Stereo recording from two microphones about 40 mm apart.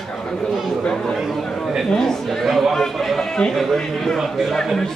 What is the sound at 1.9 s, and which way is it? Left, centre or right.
Speech, centre.